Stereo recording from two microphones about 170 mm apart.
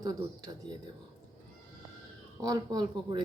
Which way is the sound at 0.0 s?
20° right (ahead or behind).